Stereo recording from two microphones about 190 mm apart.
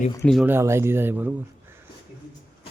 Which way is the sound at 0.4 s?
10° right (ahead or behind).